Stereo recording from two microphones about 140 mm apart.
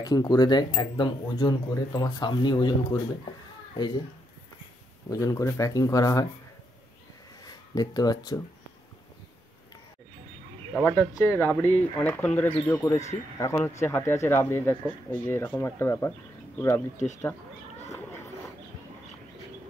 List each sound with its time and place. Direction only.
0.0 s speech: 25° left (ahead or behind)
5.1 s speech: 25° left (ahead or behind)
7.4 s speech: 25° left (ahead or behind)
10.7 s speech: 10° left (ahead or behind)
16.9 s speech: 60° left (ahead or behind)
17.2 s a sound: 15° left (ahead or behind)